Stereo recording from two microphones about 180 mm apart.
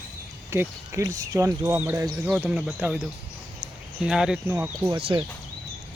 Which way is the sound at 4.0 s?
5° right (ahead or behind).